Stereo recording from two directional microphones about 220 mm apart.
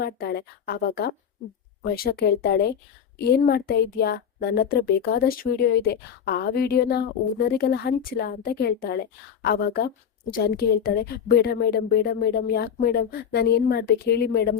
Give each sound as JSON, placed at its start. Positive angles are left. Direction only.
{"t": 0.0, "sound": "speech", "side_deg": 45}